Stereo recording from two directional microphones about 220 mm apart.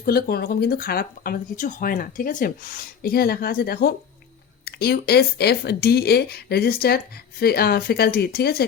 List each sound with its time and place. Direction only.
0.0 s speech: 45° left (ahead or behind)